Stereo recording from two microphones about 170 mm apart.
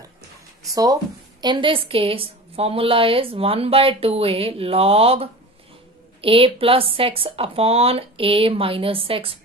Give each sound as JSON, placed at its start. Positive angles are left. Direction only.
{"t": 1.4, "sound": "a woman's voice", "side_deg": -30}